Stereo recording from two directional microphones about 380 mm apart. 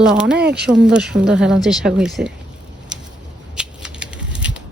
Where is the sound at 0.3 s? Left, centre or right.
Right.